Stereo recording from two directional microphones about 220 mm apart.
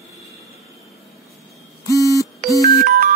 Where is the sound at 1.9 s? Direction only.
15° left (ahead or behind).